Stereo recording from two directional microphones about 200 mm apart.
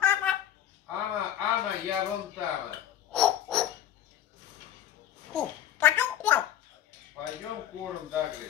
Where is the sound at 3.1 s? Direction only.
5° left (ahead or behind).